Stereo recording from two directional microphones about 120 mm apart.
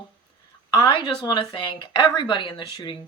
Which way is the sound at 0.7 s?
40° left (ahead or behind).